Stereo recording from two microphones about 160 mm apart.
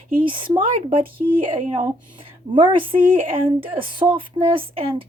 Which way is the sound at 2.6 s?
30° right (ahead or behind).